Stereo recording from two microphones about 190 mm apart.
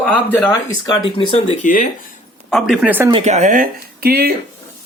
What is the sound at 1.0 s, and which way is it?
Speech, 35° left (ahead or behind).